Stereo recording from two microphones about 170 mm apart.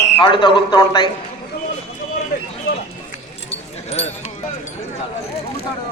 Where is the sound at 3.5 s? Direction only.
35° left (ahead or behind).